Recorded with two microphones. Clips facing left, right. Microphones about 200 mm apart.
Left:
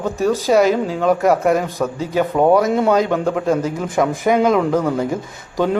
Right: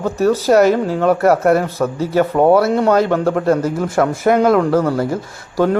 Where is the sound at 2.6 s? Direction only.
15° left (ahead or behind).